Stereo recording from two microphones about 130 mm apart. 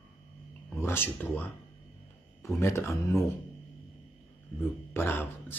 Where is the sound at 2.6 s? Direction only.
20° left (ahead or behind).